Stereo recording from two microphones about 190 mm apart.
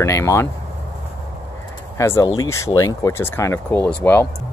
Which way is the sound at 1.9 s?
15° left (ahead or behind).